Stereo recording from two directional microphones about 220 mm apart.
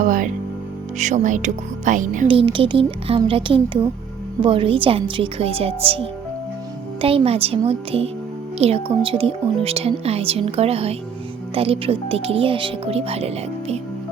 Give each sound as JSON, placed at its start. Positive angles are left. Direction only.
{"t": 0.0, "sound": "music", "side_deg": -35}
{"t": 0.9, "sound": "speech", "side_deg": -35}
{"t": 2.2, "sound": "speech", "side_deg": -25}